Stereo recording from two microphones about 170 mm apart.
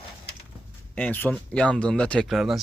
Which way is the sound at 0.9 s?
10° left (ahead or behind).